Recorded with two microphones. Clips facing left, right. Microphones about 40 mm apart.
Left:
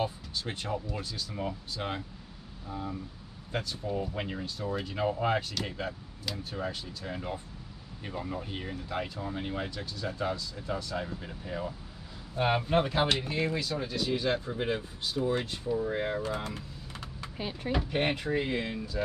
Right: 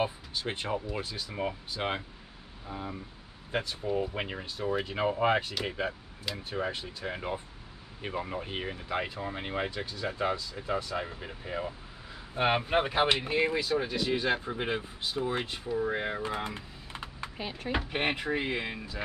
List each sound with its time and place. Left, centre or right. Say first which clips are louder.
0.0 s speech: right 2 dB; right
15.8 s typing: even; centre
17.6 s speech: left 1 dB; right